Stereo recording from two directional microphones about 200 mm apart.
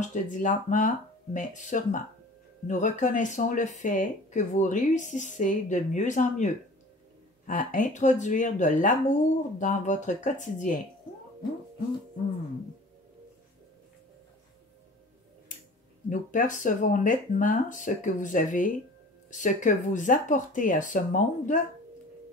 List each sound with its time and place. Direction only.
0.0 s speech: 40° left (ahead or behind)
16.1 s speech: 40° left (ahead or behind)